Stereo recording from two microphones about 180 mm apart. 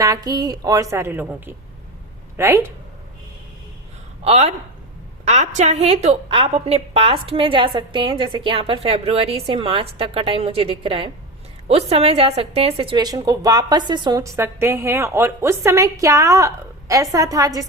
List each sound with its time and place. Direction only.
0.0 s a woman's voice: 20° right (ahead or behind)
4.2 s a woman's voice: 35° right (ahead or behind); by 17.7 s 20° right (ahead or behind)